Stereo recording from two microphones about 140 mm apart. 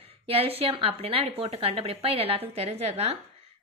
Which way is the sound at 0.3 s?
45° right (ahead or behind).